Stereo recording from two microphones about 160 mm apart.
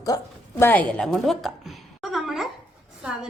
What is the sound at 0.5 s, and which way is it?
A woman's voice, 10° left (ahead or behind).